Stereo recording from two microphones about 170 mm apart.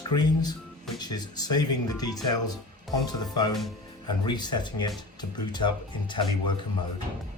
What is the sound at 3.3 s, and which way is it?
Speech, 25° left (ahead or behind).